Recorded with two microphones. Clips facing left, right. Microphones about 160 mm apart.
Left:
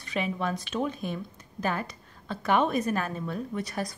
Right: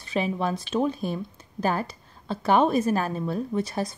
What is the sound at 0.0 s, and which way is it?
A woman's voice, 30° right (ahead or behind).